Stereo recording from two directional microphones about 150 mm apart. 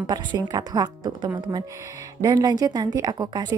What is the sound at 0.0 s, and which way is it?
A woman's voice, 30° right (ahead or behind).